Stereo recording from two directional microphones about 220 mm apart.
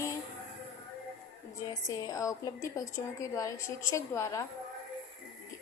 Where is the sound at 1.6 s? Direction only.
15° left (ahead or behind).